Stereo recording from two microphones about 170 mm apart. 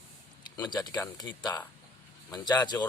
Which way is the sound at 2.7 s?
15° left (ahead or behind).